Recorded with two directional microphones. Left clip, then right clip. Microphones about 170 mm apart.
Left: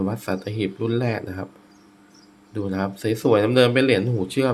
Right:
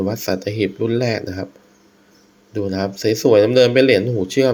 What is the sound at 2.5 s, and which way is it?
Speech, 10° right (ahead or behind).